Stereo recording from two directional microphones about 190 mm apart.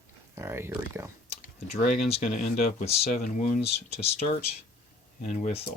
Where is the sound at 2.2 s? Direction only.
40° left (ahead or behind).